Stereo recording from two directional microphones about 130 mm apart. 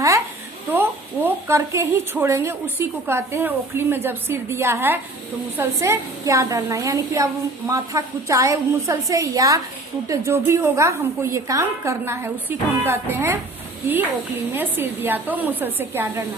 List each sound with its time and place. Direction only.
0.7 s a woman's voice: 15° right (ahead or behind)
14.5 s speech: 15° right (ahead or behind)